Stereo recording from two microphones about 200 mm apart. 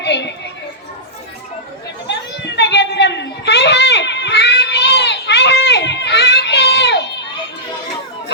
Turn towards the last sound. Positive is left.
turn(degrees=60)  # may be behind; listen again after turning